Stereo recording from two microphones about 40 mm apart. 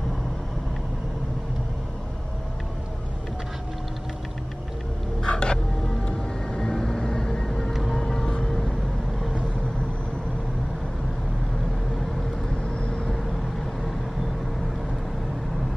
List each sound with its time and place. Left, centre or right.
5.2 s a sound: left
6.0 s vehicle: left
12.6 s vehicle: left